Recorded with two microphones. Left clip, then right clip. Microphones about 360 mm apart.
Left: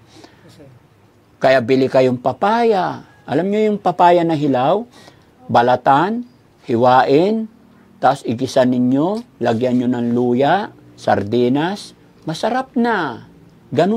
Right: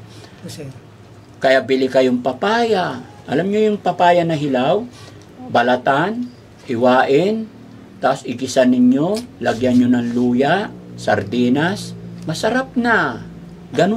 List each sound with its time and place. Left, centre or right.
1.4 s speech: left